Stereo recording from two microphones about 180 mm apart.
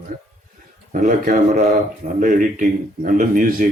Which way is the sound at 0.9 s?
40° right (ahead or behind).